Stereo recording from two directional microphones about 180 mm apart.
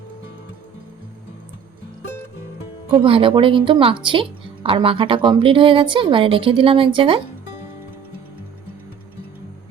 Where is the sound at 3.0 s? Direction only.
30° right (ahead or behind).